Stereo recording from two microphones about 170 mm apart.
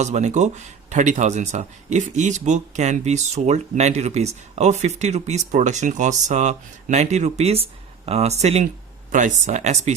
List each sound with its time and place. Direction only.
0.0 s speech: 45° right (ahead or behind)